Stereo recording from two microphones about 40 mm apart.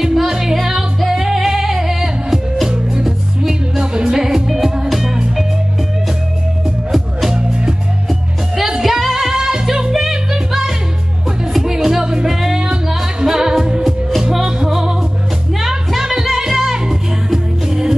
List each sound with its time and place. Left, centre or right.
0.1 s music: centre
6.9 s music: centre
7.3 s music: right
8.1 s music: centre